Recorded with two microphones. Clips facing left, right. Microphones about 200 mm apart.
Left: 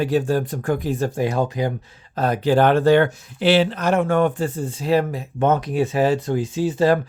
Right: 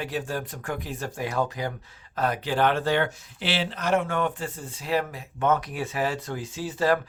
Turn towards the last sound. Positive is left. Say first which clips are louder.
# left 7 dB
turn(degrees=25)  # may be behind; listen again after turning